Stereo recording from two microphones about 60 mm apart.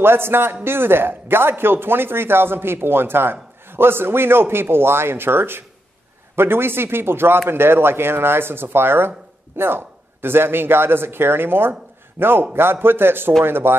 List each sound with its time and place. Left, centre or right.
0.0 s speech: right